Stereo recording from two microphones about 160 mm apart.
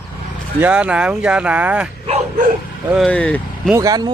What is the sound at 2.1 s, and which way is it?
Speech, 55° right (ahead or behind).